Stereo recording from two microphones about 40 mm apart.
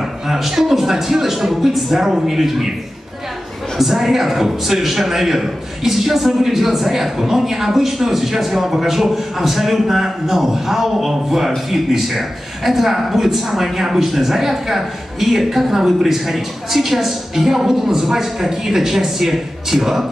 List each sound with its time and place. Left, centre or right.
0.3 s a man's voice: centre
3.7 s a man's voice: centre